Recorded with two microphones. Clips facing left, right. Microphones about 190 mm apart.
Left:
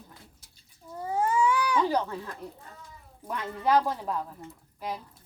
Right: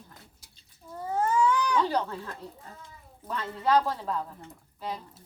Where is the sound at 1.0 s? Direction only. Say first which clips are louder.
Even; 10° left (ahead or behind).